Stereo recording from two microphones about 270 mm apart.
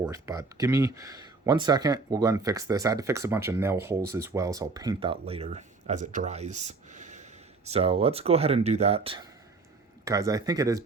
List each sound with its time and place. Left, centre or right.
0.0 s speech: centre
6.7 s a sound: right
7.7 s speech: right